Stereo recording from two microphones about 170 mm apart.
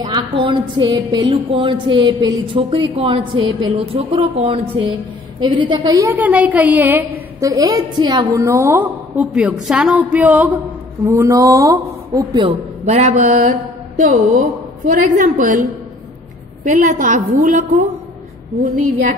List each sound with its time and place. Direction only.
0.0 s speech: 30° right (ahead or behind)
6.0 s a woman's voice: 10° right (ahead or behind); by 15.6 s 50° right (ahead or behind)
16.6 s a woman's voice: 45° right (ahead or behind)